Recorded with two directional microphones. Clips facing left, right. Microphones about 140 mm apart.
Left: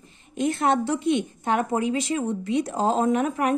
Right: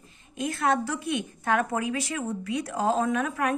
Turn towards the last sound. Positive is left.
turn(degrees=25)  # may be behind; listen again after turning